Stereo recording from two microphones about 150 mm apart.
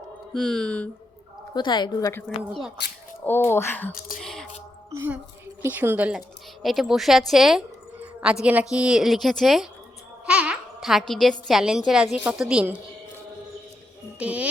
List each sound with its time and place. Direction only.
0.3 s a woman's voice: 5° left (ahead or behind)
1.5 s a woman's voice: 30° left (ahead or behind)
2.5 s a woman's voice: centre (ahead or behind)
3.2 s speech: 15° left (ahead or behind)
4.2 s speech: centre (ahead or behind)
4.9 s a sound: 15° right (ahead or behind)
5.6 s a woman's voice: 15° right (ahead or behind)
14.2 s speech: 10° right (ahead or behind)